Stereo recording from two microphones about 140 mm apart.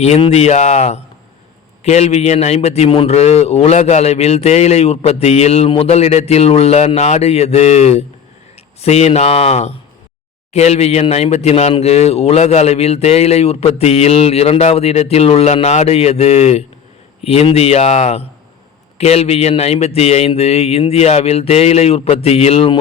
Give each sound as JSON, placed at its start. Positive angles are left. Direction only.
{"t": 0.0, "sound": "a man's voice", "side_deg": 50}